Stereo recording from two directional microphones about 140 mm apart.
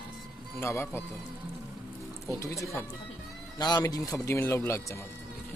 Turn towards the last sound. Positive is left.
turn(degrees=20)  # may be behind; listen again after turning